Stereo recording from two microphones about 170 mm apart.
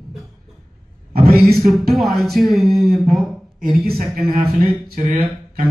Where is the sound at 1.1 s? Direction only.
65° right (ahead or behind).